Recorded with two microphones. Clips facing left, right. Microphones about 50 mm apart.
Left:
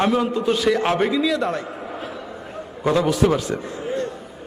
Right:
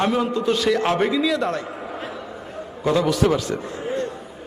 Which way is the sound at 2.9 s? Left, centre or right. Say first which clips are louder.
Left 1 dB; centre.